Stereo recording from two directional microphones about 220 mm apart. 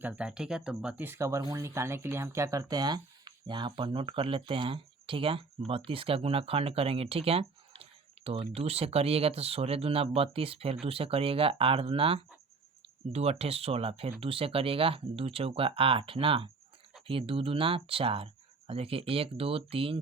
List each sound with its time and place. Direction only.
0.0 s speech: 5° right (ahead or behind); by 20.0 s 25° right (ahead or behind)